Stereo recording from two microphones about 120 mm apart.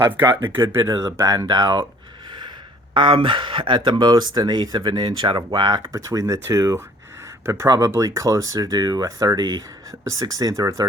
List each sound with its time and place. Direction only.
0.0 s speech: 20° right (ahead or behind)
0.8 s speech: 30° right (ahead or behind)
2.9 s speech: 45° right (ahead or behind); by 10.8 s 25° right (ahead or behind)